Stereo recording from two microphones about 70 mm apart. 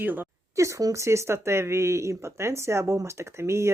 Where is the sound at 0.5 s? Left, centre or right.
Right.